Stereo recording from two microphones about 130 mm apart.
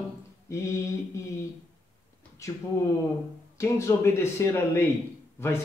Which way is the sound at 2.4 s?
25° left (ahead or behind).